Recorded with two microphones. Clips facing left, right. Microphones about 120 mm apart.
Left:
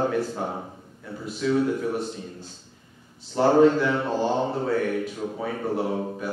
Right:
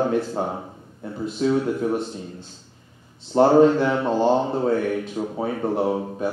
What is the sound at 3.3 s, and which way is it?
Speech, 30° right (ahead or behind).